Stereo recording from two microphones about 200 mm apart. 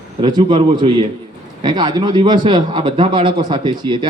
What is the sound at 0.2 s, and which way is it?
A man's voice, 20° right (ahead or behind).